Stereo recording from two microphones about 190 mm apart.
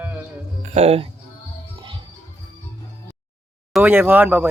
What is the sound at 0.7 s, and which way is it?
Speech, 30° right (ahead or behind).